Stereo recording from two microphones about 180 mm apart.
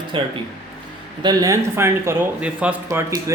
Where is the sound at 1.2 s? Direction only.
20° right (ahead or behind).